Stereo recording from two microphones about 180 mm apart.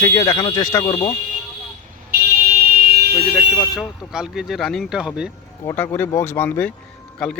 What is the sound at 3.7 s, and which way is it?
Speech, 5° right (ahead or behind).